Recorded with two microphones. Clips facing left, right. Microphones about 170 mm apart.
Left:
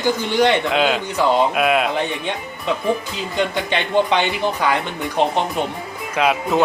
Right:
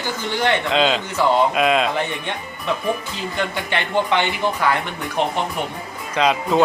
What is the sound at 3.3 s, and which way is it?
Speech, 20° left (ahead or behind).